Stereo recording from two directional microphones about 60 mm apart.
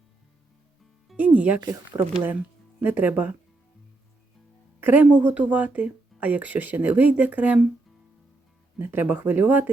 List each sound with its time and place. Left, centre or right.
1.1 s music: right
2.8 s speech: right
4.8 s speech: right
5.1 s speech: right
8.8 s speech: right